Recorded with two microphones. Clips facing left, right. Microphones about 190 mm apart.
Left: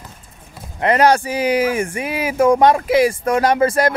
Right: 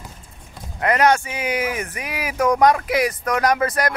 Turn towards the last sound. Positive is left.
turn(degrees=25)  # may be behind; listen again after turning